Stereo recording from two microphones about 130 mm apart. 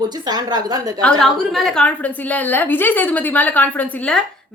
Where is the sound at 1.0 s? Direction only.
Centre (ahead or behind).